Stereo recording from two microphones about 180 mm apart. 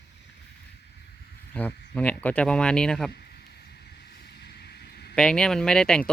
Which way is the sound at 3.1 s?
65° left (ahead or behind).